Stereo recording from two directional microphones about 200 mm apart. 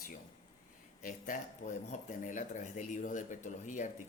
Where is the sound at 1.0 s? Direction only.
40° left (ahead or behind).